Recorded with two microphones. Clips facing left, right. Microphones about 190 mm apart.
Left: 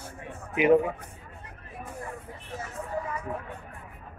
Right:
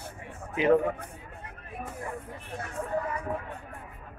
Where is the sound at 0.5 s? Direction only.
15° left (ahead or behind).